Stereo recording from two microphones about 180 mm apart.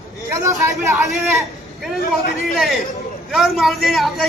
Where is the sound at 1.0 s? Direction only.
Centre (ahead or behind).